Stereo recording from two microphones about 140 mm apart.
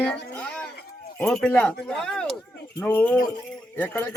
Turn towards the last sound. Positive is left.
turn(degrees=10)  # may be behind; listen again after turning